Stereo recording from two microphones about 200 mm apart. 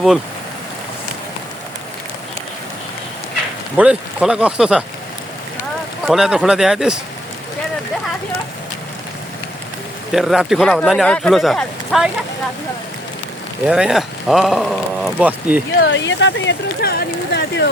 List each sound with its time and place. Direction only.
3.8 s speech: 5° right (ahead or behind)
6.1 s speech: centre (ahead or behind)
10.1 s speech: centre (ahead or behind)
13.7 s speech: 5° right (ahead or behind)
15.8 s speech: 65° left (ahead or behind)